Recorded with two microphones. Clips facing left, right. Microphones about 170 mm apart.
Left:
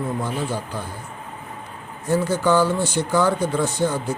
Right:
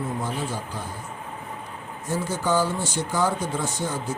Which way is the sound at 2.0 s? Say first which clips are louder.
Left 6 dB; 65° left (ahead or behind).